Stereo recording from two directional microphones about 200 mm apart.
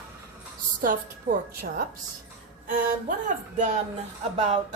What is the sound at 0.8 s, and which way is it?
Speech, 45° right (ahead or behind).